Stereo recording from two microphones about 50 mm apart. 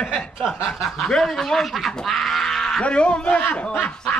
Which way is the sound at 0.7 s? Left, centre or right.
Centre.